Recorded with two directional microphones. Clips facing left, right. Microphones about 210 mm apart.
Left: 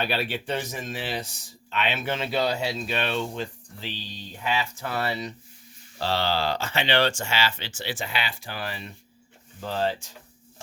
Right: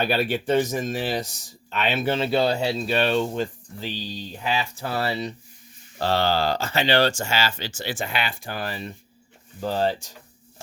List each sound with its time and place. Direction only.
0.0 s speech: 45° right (ahead or behind)
6.0 s speech: 50° right (ahead or behind)